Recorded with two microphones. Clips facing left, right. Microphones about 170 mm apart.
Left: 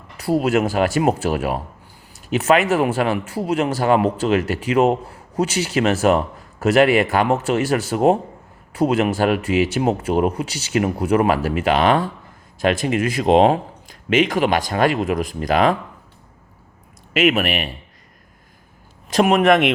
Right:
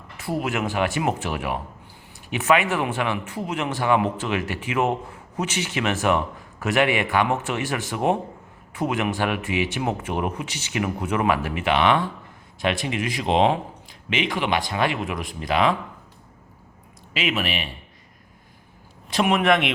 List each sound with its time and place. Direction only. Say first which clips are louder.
0.5 s a man's voice: left 6 dB; 40° left (ahead or behind)
17.2 s speech: left 8 dB; 50° left (ahead or behind)
19.1 s speech: left 5 dB; 45° left (ahead or behind)